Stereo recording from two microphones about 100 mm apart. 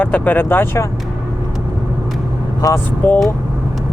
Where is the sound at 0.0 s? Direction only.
15° left (ahead or behind).